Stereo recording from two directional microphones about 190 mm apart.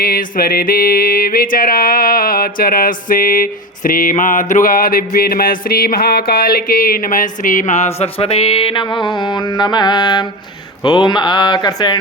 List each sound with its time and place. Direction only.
0.0 s music: 50° left (ahead or behind); by 10.2 s 20° left (ahead or behind)
10.8 s speech: 25° left (ahead or behind)